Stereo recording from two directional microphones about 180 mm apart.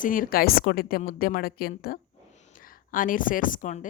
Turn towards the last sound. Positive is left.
turn(degrees=45)  # may be behind; listen again after turning